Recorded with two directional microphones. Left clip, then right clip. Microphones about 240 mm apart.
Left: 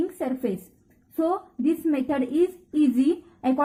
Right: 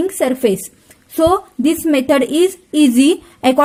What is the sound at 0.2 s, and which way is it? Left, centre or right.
A woman's voice, right.